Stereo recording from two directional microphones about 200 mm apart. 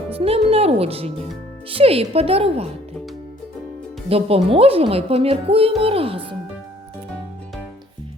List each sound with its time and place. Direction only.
0.1 s speech: 30° right (ahead or behind)
4.1 s speech: 30° right (ahead or behind)